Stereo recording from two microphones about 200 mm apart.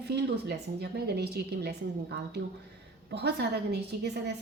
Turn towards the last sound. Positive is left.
turn(degrees=-55)  # may be behind; listen again after turning